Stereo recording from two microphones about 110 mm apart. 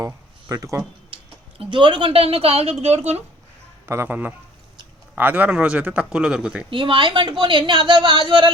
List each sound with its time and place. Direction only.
0.5 s speech: 30° right (ahead or behind)
1.1 s speech: 50° right (ahead or behind)
2.8 s speech: 75° right (ahead or behind)
3.8 s speech: 20° right (ahead or behind)
6.7 s a woman's voice: 50° right (ahead or behind)